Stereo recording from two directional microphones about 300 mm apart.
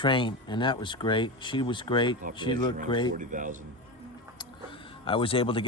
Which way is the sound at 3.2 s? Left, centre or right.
Right.